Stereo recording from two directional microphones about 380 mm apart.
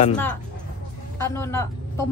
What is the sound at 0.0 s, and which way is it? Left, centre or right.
A woman's voice, centre.